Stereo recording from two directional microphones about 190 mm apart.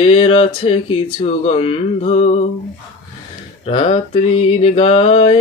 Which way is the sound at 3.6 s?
30° left (ahead or behind).